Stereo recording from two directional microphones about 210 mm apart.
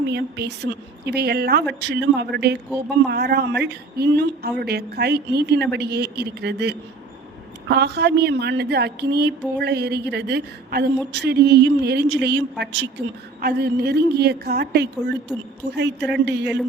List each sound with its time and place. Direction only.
0.1 s a woman's voice: 50° right (ahead or behind)